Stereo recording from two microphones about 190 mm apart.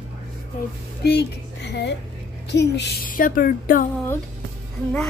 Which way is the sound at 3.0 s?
45° left (ahead or behind).